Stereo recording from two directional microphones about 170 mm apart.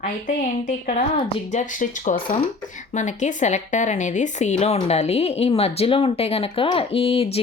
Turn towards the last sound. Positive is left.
turn(degrees=35)  # may be behind; listen again after turning